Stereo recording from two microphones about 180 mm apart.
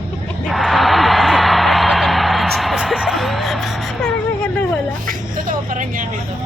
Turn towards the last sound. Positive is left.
turn(degrees=-45)  # may be behind; listen again after turning